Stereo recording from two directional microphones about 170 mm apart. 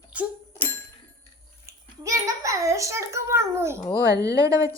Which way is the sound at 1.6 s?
20° right (ahead or behind).